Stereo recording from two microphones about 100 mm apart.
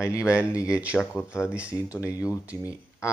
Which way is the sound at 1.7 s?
30° left (ahead or behind).